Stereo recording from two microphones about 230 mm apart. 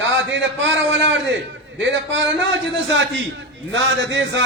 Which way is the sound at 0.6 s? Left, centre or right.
Right.